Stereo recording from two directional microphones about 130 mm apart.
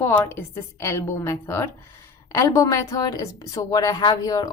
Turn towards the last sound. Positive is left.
turn(degrees=30)  # may be behind; listen again after turning